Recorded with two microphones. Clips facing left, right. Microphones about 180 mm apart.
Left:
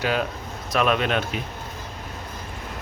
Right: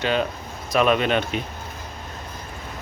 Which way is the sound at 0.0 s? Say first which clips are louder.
Right 2 dB; 5° left (ahead or behind).